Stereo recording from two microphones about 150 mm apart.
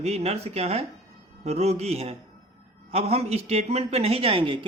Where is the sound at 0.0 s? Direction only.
45° right (ahead or behind).